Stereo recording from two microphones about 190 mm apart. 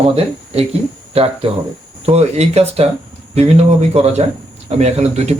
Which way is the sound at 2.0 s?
35° right (ahead or behind).